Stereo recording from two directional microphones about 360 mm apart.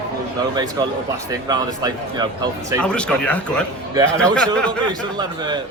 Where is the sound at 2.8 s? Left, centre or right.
Centre.